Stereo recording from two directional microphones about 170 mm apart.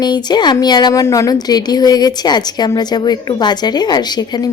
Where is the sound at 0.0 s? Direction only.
25° left (ahead or behind).